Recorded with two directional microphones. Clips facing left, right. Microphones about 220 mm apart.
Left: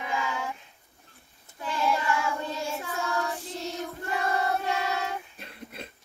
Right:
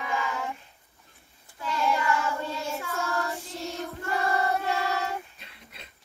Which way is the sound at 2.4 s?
15° left (ahead or behind).